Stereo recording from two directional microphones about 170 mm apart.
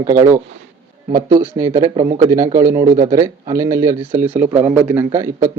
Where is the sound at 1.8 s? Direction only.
30° right (ahead or behind).